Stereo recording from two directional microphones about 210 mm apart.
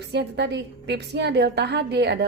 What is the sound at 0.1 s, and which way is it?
A woman's voice, 55° right (ahead or behind).